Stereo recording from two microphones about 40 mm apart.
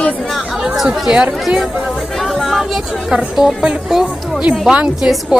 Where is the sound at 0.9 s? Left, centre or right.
Right.